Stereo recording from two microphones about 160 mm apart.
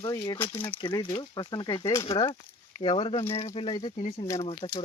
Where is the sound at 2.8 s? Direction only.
35° left (ahead or behind).